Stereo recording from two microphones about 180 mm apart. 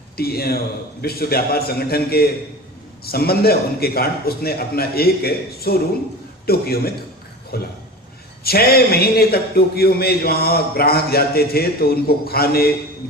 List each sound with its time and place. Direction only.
0.2 s speech: 60° left (ahead or behind)